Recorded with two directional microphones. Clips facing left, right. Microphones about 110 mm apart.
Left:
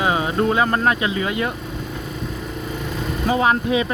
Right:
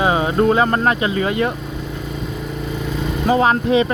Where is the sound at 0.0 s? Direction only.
30° right (ahead or behind).